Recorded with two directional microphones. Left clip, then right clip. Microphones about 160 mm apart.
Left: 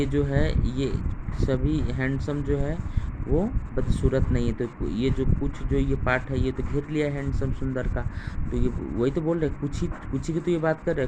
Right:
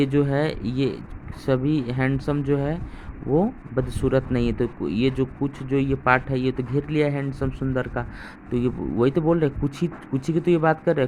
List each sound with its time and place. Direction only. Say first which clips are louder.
0.0 s speech: right 4 dB; 50° right (ahead or behind)